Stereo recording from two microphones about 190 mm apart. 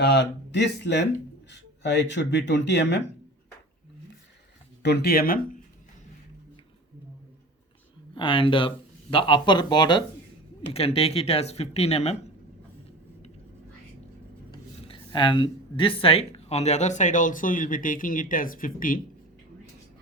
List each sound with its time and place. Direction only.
0.0 s speech: 65° left (ahead or behind)
4.8 s speech: 60° left (ahead or behind)
8.1 s speech: 25° left (ahead or behind)
14.5 s speech: 25° left (ahead or behind); by 19.0 s 45° left (ahead or behind)